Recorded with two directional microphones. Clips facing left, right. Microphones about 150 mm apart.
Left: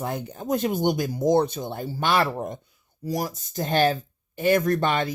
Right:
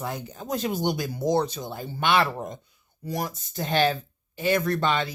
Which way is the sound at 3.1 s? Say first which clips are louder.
Left 3 dB; 35° left (ahead or behind).